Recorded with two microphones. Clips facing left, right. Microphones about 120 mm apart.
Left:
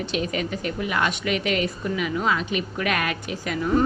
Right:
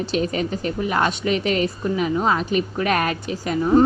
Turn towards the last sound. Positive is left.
turn(degrees=-35)  # may be behind; listen again after turning